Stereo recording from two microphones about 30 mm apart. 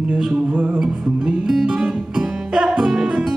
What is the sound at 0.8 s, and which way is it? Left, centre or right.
Music, right.